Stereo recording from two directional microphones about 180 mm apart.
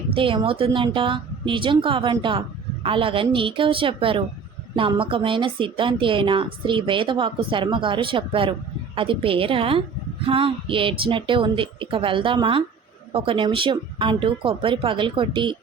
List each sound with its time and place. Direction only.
0.1 s a woman's voice: 30° right (ahead or behind)